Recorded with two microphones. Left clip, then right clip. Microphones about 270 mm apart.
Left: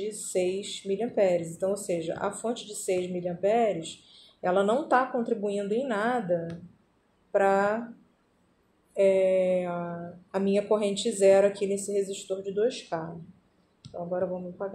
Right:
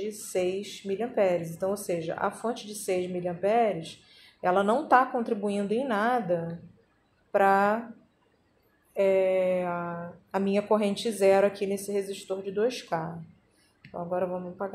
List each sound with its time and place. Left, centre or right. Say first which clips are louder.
0.3 s speech: left 1 dB; centre
8.9 s speech: left 1 dB; centre
14.1 s speech: right 1 dB; centre